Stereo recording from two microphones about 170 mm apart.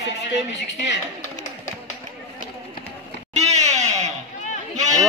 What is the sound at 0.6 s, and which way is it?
Speech, 90° left.